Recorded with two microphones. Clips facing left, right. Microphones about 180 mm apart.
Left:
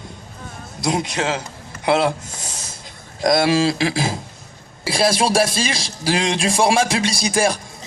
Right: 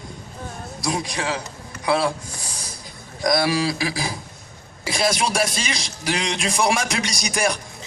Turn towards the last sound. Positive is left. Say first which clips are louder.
# left 5 dB
turn(degrees=30)  # may be behind; listen again after turning